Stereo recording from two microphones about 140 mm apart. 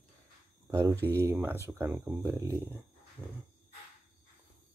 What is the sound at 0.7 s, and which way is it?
Speech, 20° right (ahead or behind).